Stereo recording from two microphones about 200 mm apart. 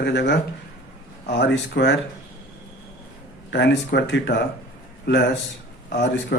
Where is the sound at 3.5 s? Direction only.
60° left (ahead or behind).